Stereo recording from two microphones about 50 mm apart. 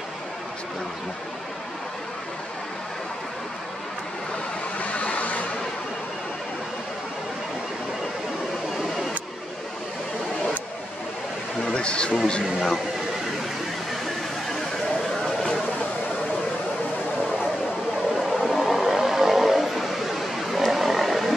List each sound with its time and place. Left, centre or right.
4.7 s vehicle: left
11.7 s speech: centre
18.1 s vehicle: centre